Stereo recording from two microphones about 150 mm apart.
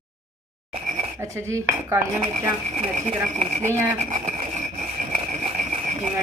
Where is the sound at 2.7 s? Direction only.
50° right (ahead or behind).